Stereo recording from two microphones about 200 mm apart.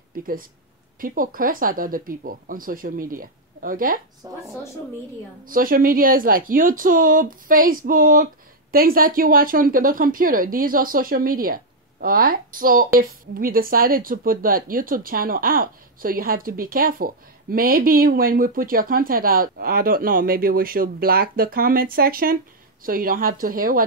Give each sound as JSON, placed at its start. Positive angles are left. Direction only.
{"t": 0.1, "sound": "a woman's voice", "side_deg": -45}
{"t": 4.2, "sound": "speech", "side_deg": -20}
{"t": 5.5, "sound": "a woman's voice", "side_deg": -45}